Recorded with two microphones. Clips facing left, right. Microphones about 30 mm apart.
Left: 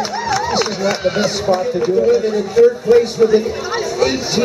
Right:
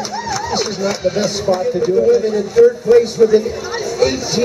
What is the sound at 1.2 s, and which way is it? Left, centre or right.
Speech, centre.